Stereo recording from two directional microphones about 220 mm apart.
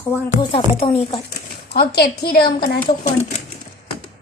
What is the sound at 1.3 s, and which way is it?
Speech, 45° left (ahead or behind).